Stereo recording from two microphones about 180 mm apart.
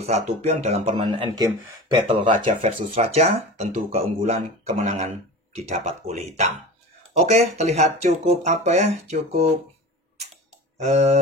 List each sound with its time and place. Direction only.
0.0 s speech: 35° right (ahead or behind)
10.8 s speech: 40° right (ahead or behind)